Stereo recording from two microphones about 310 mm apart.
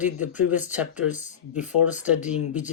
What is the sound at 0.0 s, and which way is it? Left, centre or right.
Speech, centre.